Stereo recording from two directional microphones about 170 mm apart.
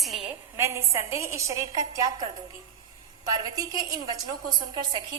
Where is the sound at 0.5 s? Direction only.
15° right (ahead or behind).